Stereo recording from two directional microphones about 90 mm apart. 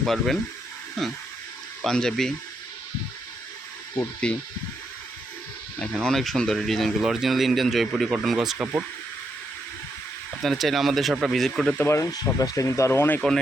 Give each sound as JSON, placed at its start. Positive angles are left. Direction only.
{"t": 0.0, "sound": "speech", "side_deg": 0}
{"t": 1.8, "sound": "speech", "side_deg": 5}
{"t": 4.2, "sound": "speech", "side_deg": 10}
{"t": 5.8, "sound": "speech", "side_deg": 5}
{"t": 10.4, "sound": "speech", "side_deg": 0}
{"t": 12.1, "sound": "speech", "side_deg": 45}